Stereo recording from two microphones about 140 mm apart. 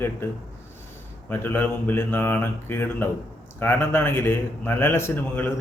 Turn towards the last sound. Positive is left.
turn(degrees=15)  # may be behind; listen again after turning